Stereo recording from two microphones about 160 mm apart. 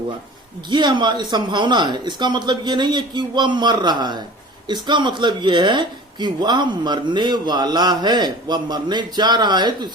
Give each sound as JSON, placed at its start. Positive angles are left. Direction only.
{"t": 0.7, "sound": "speech", "side_deg": -30}